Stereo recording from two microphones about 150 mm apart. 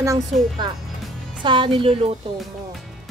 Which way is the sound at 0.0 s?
20° right (ahead or behind).